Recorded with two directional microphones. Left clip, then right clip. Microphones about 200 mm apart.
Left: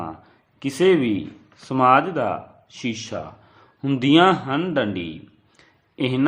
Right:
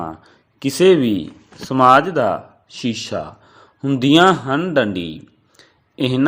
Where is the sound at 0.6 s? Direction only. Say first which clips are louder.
Right 5 dB; 25° right (ahead or behind).